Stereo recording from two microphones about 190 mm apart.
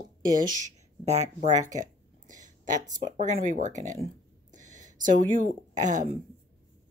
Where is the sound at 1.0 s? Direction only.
40° right (ahead or behind).